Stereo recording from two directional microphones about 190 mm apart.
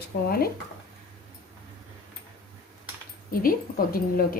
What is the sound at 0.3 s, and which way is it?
Speech, 55° left (ahead or behind).